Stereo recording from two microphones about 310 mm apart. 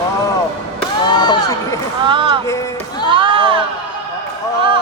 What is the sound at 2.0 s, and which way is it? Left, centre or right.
Music, centre.